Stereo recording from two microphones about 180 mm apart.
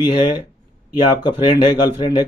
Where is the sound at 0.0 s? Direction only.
25° left (ahead or behind).